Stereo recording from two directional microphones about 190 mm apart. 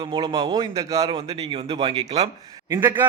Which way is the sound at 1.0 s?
30° right (ahead or behind).